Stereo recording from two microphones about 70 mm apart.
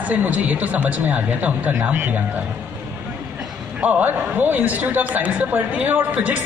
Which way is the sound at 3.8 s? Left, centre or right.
Right.